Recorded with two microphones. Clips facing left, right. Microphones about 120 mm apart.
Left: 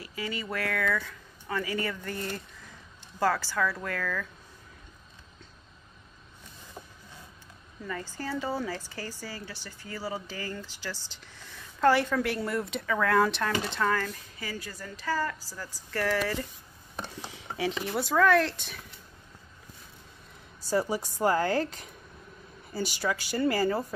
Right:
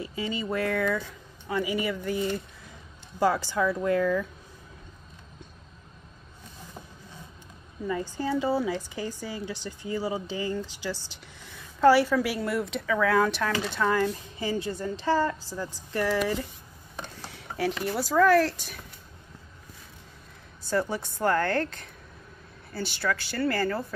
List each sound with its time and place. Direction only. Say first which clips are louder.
0.0 s a woman's voice: right 4 dB; 25° right (ahead or behind)
7.8 s speech: right 6 dB; 15° right (ahead or behind)
13.8 s a woman's voice: right 4 dB; 15° right (ahead or behind)
17.3 s speech: right 3 dB; centre (ahead or behind)
20.7 s speech: even; 5° left (ahead or behind)